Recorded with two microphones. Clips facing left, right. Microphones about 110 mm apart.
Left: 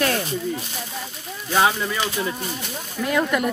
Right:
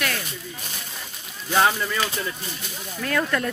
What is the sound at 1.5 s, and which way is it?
Speech, 5° left (ahead or behind).